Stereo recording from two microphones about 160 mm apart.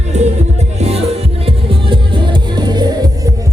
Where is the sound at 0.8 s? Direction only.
40° right (ahead or behind).